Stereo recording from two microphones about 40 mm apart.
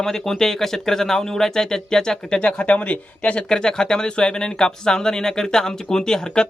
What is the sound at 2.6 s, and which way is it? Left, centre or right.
Speech, left.